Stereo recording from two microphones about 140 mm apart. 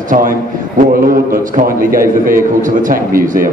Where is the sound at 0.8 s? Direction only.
85° right.